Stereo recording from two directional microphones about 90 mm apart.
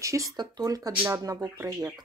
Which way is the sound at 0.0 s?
35° right (ahead or behind).